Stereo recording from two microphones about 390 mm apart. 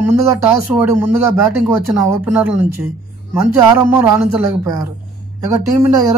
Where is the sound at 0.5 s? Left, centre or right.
Centre.